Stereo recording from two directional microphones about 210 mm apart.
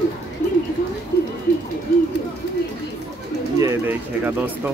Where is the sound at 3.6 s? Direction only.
10° right (ahead or behind).